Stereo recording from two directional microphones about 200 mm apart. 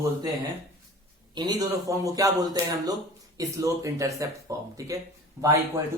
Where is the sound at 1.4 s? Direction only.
20° right (ahead or behind).